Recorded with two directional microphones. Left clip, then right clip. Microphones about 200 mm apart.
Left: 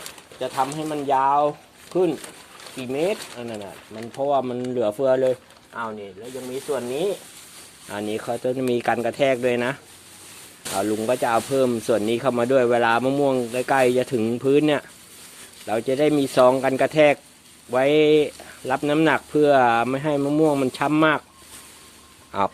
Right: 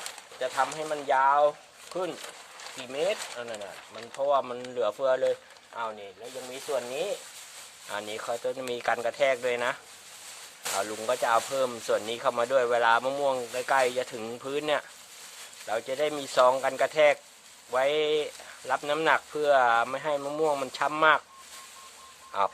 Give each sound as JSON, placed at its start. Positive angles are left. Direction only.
{"t": 0.3, "sound": "speech", "side_deg": 5}
{"t": 7.9, "sound": "speech", "side_deg": 20}
{"t": 10.8, "sound": "speech", "side_deg": 25}
{"t": 22.3, "sound": "speech", "side_deg": 30}